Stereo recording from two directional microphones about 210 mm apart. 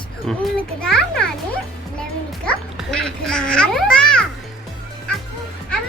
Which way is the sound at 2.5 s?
5° left (ahead or behind).